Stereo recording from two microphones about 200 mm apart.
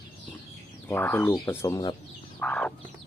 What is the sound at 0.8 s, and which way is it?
Speech, 10° left (ahead or behind).